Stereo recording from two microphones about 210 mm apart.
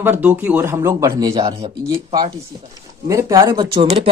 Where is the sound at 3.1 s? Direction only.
15° right (ahead or behind).